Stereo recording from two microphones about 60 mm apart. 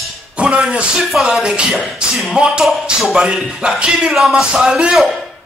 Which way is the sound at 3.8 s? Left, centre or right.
Centre.